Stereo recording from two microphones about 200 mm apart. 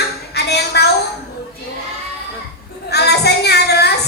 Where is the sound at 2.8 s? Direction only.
55° left (ahead or behind).